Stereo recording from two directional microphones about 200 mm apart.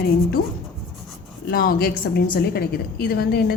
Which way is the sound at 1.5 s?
45° left (ahead or behind).